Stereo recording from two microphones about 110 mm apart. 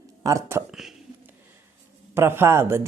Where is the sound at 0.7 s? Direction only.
5° right (ahead or behind).